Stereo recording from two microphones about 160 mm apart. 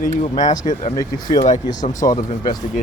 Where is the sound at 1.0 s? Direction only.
25° left (ahead or behind).